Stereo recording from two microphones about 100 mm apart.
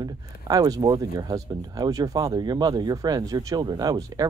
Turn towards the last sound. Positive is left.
turn(degrees=-40)  # may be behind; listen again after turning